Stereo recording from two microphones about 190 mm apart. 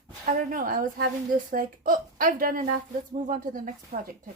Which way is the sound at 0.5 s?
50° right (ahead or behind).